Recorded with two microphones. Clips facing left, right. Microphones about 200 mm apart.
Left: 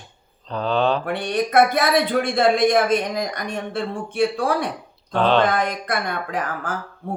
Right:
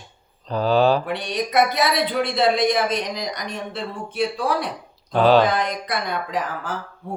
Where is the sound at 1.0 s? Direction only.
50° left (ahead or behind).